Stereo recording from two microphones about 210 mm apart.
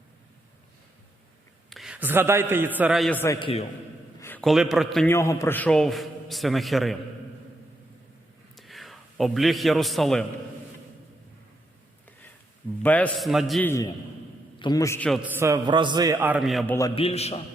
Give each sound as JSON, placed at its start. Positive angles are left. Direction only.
{"t": 1.7, "sound": "a man's voice", "side_deg": -5}
{"t": 3.4, "sound": "a man's voice", "side_deg": 30}
{"t": 4.2, "sound": "a man's voice", "side_deg": 5}
{"t": 5.1, "sound": "a man's voice", "side_deg": 15}
{"t": 8.5, "sound": "a man's voice", "side_deg": 0}
{"t": 12.8, "sound": "a man's voice", "side_deg": 5}
{"t": 13.7, "sound": "a man's voice", "side_deg": 15}
{"t": 15.2, "sound": "a man's voice", "side_deg": -15}
{"t": 16.9, "sound": "a man's voice", "side_deg": 30}